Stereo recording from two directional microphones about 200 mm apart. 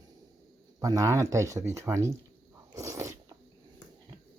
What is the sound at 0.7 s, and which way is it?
Speech, 15° right (ahead or behind).